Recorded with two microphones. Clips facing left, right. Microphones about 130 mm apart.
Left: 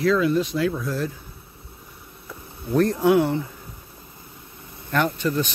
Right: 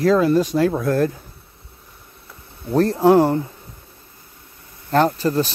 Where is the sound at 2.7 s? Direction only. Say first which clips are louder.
Right 4 dB; 35° right (ahead or behind).